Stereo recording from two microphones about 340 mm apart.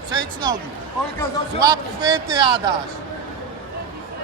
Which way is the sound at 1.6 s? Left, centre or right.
Centre.